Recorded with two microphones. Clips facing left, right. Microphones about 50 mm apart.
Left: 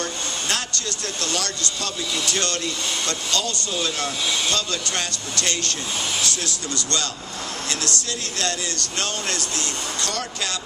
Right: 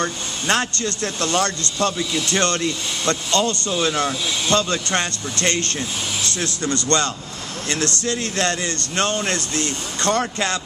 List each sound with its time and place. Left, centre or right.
0.0 s speech: right